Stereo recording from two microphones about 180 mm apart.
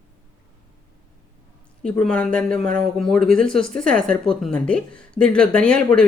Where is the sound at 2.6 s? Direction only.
50° right (ahead or behind).